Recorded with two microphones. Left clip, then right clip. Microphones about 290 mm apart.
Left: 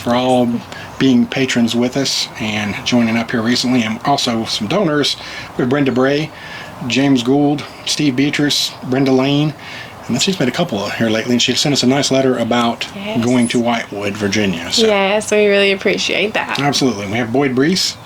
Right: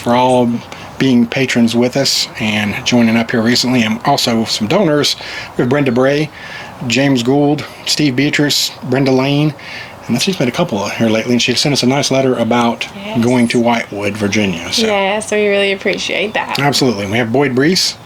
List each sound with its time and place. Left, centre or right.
0.0 s speech: right
14.8 s speech: centre
16.5 s speech: right